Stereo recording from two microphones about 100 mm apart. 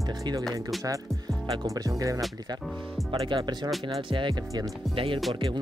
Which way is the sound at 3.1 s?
60° right (ahead or behind).